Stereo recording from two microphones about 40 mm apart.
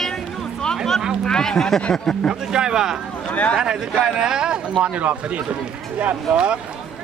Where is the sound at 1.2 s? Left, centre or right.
Centre.